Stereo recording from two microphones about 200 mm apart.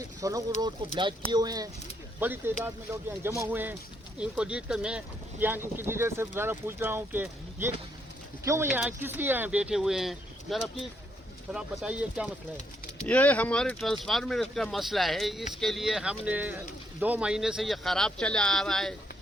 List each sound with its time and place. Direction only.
0.0 s speech: 15° right (ahead or behind)
13.1 s speech: 5° left (ahead or behind)